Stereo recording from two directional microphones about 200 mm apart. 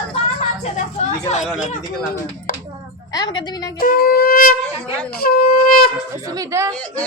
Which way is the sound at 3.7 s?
45° left (ahead or behind).